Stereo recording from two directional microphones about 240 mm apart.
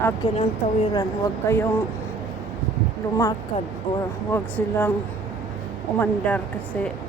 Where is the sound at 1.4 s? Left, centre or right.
Centre.